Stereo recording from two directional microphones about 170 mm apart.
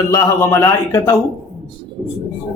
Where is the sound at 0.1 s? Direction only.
20° left (ahead or behind).